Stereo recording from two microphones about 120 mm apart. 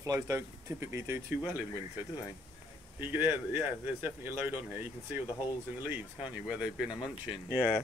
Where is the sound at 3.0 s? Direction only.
15° right (ahead or behind).